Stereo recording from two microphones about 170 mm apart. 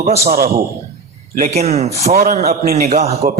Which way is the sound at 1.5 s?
40° right (ahead or behind).